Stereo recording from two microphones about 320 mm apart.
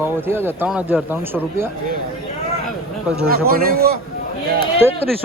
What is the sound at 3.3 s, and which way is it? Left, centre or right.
Speech, right.